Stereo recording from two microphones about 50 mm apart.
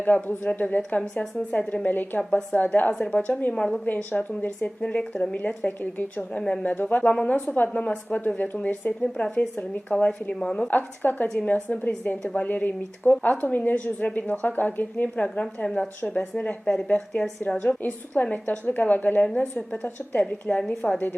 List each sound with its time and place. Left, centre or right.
0.0 s a woman's voice: left
1.0 s speech: centre
1.5 s a woman's voice: left
3.8 s a woman's voice: left
6.4 s a woman's voice: centre
10.7 s a woman's voice: left
11.3 s a woman's voice: left
17.8 s a woman's voice: left
20.6 s speech: centre